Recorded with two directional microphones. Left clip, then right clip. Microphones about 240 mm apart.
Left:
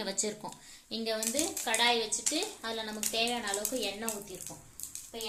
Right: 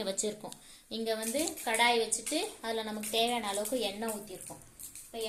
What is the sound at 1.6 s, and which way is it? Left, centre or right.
A woman's voice, centre.